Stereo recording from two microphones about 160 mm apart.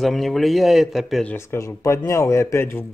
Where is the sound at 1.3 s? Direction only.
20° left (ahead or behind).